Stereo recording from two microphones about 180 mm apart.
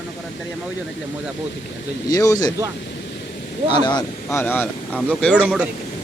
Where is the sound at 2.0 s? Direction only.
20° left (ahead or behind).